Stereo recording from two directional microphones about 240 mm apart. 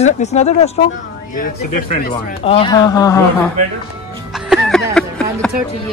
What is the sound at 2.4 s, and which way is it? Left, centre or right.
Speech, left.